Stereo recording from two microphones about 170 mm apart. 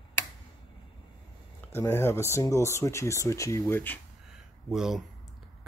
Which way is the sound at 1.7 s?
15° left (ahead or behind).